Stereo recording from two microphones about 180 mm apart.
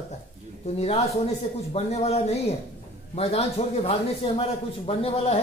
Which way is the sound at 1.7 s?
35° left (ahead or behind).